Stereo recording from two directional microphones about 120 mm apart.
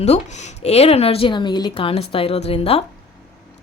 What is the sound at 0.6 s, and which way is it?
Speech, 60° left (ahead or behind).